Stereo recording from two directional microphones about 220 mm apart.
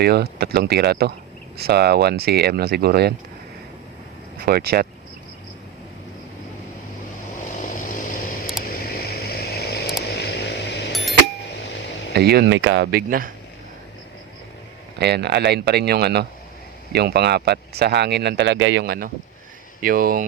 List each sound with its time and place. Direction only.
0.0 s speech: 45° right (ahead or behind)
4.4 s speech: 45° right (ahead or behind)
7.4 s vehicle: 35° left (ahead or behind)
8.6 s a sound: 40° left (ahead or behind)
12.1 s speech: 45° right (ahead or behind)
14.9 s speech: 50° right (ahead or behind)